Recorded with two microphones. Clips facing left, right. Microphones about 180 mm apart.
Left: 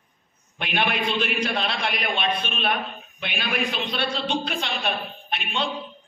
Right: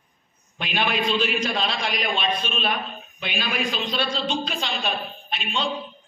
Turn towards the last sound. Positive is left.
turn(degrees=60)  # may be behind; listen again after turning